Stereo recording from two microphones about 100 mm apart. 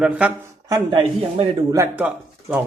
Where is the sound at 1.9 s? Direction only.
15° right (ahead or behind).